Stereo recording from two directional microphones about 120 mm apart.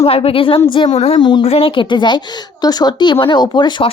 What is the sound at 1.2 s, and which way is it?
Speech, 40° left (ahead or behind).